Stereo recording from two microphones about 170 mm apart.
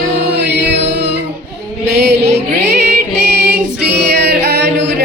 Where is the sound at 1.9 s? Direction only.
90° right.